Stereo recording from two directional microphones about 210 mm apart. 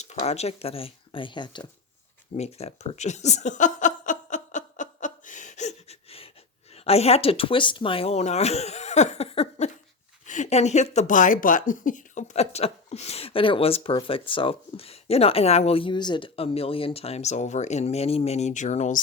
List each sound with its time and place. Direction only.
0.0 s speech: 30° left (ahead or behind)
2.3 s a sound: 30° left (ahead or behind)
6.8 s speech: 30° left (ahead or behind)